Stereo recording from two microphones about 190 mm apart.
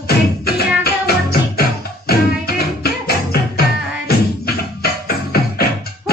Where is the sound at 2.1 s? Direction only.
55° left (ahead or behind).